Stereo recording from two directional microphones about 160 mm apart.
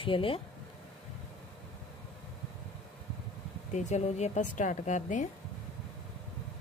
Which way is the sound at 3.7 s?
50° left (ahead or behind).